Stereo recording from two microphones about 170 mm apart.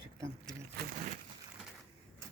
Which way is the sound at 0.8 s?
70° right (ahead or behind).